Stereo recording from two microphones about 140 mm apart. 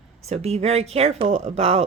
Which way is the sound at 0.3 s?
50° right (ahead or behind).